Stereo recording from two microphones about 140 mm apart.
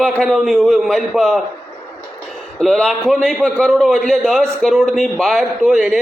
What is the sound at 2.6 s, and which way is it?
A man's voice, 5° left (ahead or behind).